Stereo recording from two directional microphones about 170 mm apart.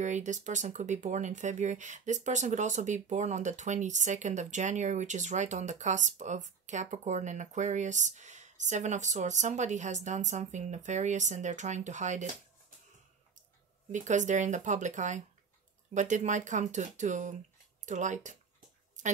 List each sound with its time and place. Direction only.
0.0 s speech: 45° right (ahead or behind)
13.9 s speech: 45° right (ahead or behind)